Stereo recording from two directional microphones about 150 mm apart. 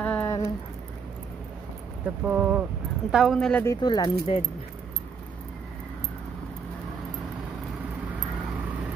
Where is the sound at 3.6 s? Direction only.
25° left (ahead or behind).